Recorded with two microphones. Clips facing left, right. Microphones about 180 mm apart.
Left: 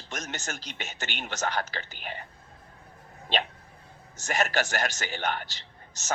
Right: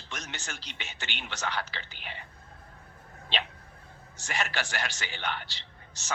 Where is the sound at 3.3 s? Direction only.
45° left (ahead or behind).